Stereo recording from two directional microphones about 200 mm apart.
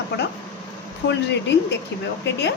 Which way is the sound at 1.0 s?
60° left (ahead or behind).